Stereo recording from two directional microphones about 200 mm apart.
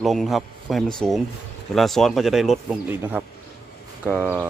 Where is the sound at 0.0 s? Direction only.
Centre (ahead or behind).